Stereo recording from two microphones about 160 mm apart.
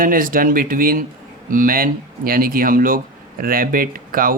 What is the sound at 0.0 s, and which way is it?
Speech, 60° right (ahead or behind).